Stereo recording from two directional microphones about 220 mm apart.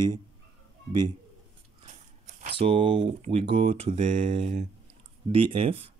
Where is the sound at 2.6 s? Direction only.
25° right (ahead or behind).